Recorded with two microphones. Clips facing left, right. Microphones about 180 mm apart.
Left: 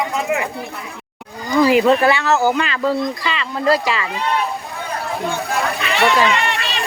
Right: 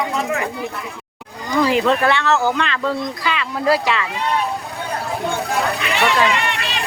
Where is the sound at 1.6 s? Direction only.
5° left (ahead or behind).